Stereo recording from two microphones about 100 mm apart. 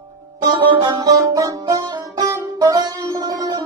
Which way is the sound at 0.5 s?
50° right (ahead or behind).